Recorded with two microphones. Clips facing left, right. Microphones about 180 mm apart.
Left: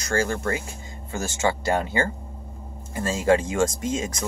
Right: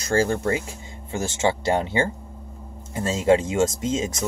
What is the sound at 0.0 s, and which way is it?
Speech, 30° right (ahead or behind).